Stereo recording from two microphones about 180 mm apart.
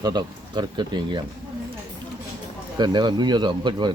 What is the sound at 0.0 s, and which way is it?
Speech, 25° right (ahead or behind).